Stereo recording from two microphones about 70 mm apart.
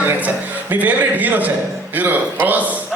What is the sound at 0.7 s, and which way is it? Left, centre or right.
Music, right.